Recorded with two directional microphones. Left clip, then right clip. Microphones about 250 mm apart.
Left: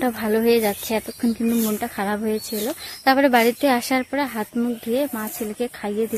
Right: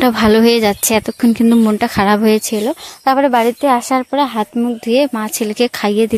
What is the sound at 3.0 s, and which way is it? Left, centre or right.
Speech, centre.